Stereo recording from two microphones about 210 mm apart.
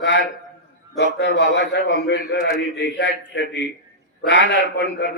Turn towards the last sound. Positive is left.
turn(degrees=55)  # may be behind; listen again after turning